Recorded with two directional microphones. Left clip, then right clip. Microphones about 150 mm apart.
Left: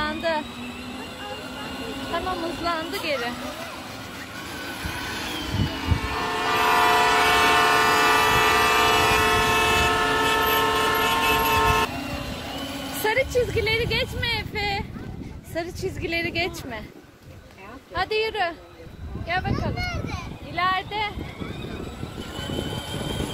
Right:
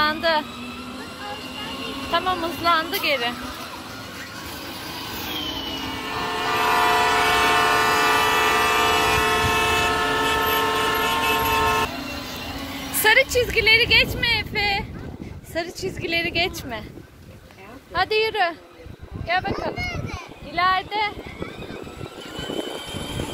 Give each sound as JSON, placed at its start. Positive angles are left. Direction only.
{"t": 0.0, "sound": "vehicle", "side_deg": -10}
{"t": 2.1, "sound": "a sound", "side_deg": -10}
{"t": 2.8, "sound": "speech", "side_deg": -5}
{"t": 5.2, "sound": "train", "side_deg": 0}
{"t": 13.0, "sound": "speech", "side_deg": 5}
{"t": 17.9, "sound": "a woman's voice", "side_deg": -45}
{"t": 19.2, "sound": "speech", "side_deg": -60}
{"t": 20.5, "sound": "a woman's voice", "side_deg": -55}